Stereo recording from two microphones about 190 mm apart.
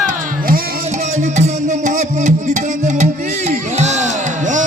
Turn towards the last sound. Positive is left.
turn(degrees=-40)  # may be behind; listen again after turning